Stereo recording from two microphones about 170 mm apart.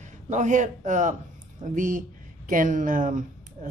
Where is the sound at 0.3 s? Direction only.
45° right (ahead or behind).